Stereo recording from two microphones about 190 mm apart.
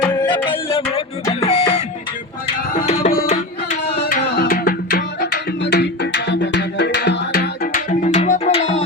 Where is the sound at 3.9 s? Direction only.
60° left (ahead or behind).